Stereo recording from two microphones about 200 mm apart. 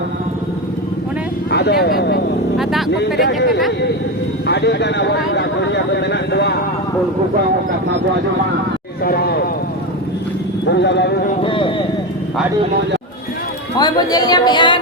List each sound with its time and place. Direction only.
1.5 s speech: 55° left (ahead or behind)
2.6 s vehicle: centre (ahead or behind)
3.2 s speech: 50° left (ahead or behind)
9.0 s a sound: 50° left (ahead or behind)
10.7 s speech: 60° left (ahead or behind)
11.4 s a sound: 25° left (ahead or behind)
13.7 s speech: 20° left (ahead or behind)